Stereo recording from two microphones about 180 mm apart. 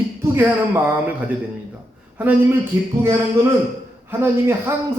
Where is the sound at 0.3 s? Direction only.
10° right (ahead or behind).